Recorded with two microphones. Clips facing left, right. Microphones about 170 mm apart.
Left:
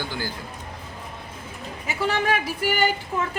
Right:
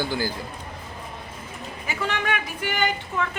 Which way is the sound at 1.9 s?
30° left (ahead or behind).